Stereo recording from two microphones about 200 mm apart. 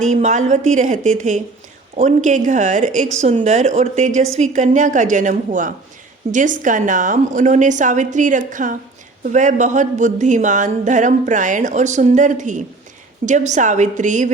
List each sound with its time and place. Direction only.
0.1 s speech: 35° right (ahead or behind)